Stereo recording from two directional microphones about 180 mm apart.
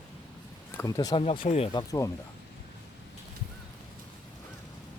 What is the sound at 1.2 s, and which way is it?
Speech, 35° left (ahead or behind).